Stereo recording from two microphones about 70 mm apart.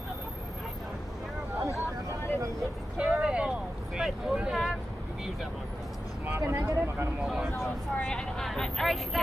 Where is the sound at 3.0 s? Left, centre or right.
Centre.